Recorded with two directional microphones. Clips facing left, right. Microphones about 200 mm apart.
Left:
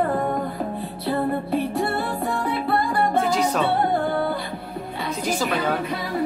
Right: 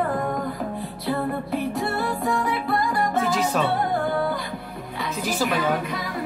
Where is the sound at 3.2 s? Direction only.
Centre (ahead or behind).